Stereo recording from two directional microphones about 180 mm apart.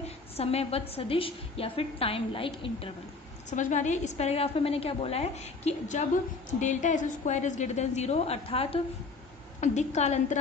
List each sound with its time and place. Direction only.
0.0 s a woman's voice: 35° left (ahead or behind)
3.4 s a woman's voice: 40° left (ahead or behind)